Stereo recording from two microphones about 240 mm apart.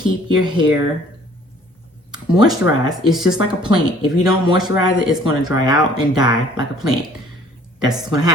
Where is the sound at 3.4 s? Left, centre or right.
Centre.